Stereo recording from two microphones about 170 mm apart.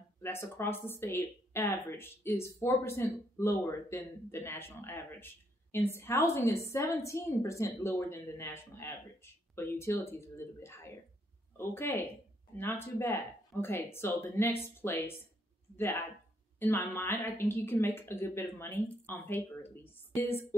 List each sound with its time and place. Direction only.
0.2 s speech: 15° left (ahead or behind)